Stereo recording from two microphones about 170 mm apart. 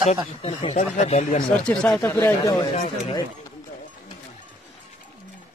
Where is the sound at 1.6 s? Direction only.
5° left (ahead or behind).